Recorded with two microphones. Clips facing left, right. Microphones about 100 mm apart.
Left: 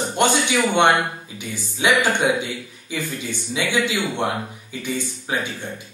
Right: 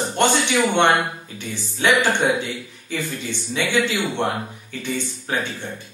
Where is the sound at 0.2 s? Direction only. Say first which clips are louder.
Even; 10° left (ahead or behind).